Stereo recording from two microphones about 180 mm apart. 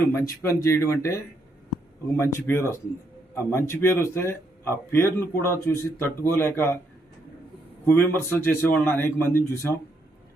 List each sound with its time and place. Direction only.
0.1 s speech: 15° left (ahead or behind)
7.9 s speech: 15° left (ahead or behind)